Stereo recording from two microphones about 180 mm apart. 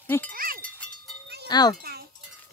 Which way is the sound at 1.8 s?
60° right (ahead or behind).